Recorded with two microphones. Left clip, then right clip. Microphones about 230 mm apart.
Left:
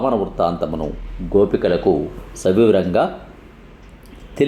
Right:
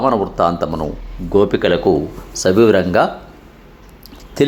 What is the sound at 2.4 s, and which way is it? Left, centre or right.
Speech, right.